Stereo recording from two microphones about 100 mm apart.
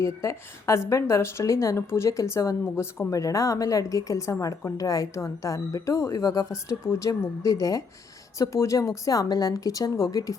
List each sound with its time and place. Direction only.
0.0 s a woman's voice: 30° left (ahead or behind)